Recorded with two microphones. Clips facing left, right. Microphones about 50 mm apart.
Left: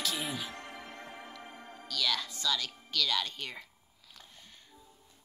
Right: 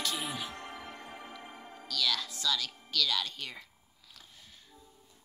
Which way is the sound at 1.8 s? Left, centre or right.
Centre.